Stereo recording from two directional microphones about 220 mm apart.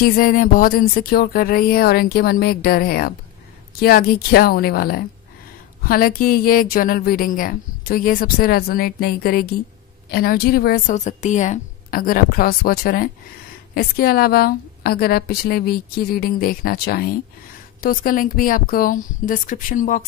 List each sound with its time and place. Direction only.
0.0 s a woman's voice: 40° left (ahead or behind)